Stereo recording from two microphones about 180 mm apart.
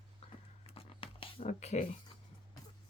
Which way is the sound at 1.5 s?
40° left (ahead or behind).